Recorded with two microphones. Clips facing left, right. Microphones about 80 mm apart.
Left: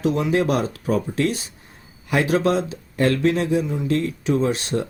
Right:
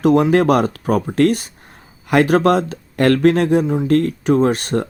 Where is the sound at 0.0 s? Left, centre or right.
Right.